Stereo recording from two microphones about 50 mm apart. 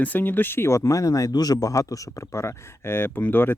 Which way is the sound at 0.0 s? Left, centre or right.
Left.